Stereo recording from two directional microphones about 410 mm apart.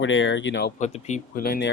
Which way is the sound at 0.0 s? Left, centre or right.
Left.